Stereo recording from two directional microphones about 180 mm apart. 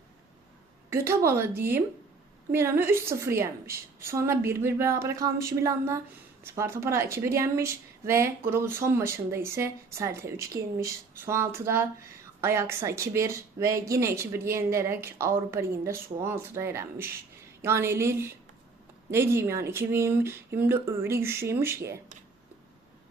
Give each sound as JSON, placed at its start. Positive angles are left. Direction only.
{"t": 0.9, "sound": "speech", "side_deg": -15}